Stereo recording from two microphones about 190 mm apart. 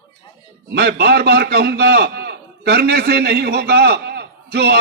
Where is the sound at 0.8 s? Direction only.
60° right (ahead or behind).